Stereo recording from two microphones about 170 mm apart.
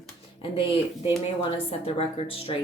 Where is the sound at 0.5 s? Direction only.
30° left (ahead or behind).